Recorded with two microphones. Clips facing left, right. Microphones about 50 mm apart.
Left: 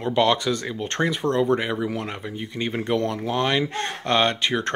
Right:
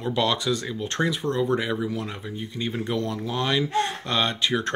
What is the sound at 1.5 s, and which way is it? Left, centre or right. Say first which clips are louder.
Speech: left 2 dB; left.